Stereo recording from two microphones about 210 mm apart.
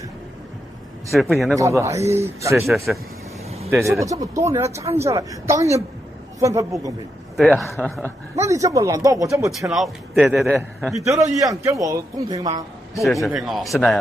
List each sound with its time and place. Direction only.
1.1 s speech: centre (ahead or behind)
1.6 s a woman's voice: 15° right (ahead or behind)
2.6 s speech: centre (ahead or behind)
4.0 s a woman's voice: 15° right (ahead or behind)
7.3 s speech: centre (ahead or behind)
8.4 s a woman's voice: 15° right (ahead or behind)
9.7 s speech: centre (ahead or behind)
11.3 s a woman's voice: 15° right (ahead or behind)
13.0 s speech: centre (ahead or behind)